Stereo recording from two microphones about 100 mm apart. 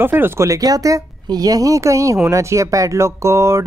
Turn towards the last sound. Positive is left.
turn(degrees=-30)  # may be behind; listen again after turning